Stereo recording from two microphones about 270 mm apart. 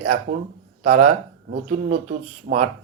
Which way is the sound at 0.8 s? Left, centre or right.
Right.